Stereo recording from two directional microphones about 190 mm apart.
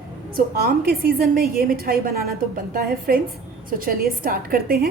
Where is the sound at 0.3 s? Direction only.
50° right (ahead or behind).